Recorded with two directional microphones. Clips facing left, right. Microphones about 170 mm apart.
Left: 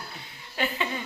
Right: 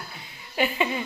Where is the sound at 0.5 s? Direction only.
15° right (ahead or behind).